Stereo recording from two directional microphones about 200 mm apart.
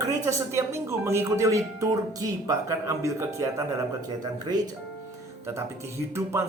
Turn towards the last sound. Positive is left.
turn(degrees=-15)  # may be behind; listen again after turning